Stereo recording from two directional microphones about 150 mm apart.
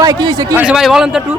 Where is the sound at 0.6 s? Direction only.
5° right (ahead or behind).